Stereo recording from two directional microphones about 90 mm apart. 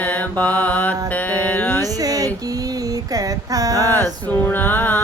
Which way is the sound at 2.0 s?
40° right (ahead or behind).